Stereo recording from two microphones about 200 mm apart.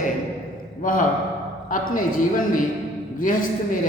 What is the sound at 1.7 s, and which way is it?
A man's voice, 40° left (ahead or behind).